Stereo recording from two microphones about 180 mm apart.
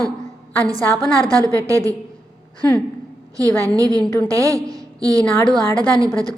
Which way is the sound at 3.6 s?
20° right (ahead or behind).